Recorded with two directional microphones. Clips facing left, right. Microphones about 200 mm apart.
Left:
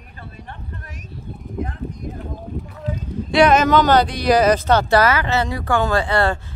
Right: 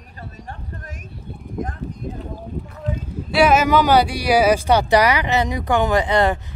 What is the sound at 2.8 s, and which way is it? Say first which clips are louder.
Speech: left 2 dB; 5° right (ahead or behind).